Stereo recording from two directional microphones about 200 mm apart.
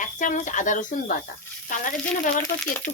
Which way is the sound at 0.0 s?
40° left (ahead or behind).